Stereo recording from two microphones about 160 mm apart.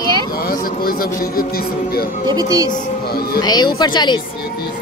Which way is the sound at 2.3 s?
25° right (ahead or behind).